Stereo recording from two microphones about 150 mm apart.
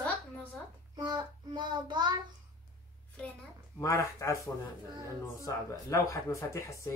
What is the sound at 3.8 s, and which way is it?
Speech, 20° left (ahead or behind).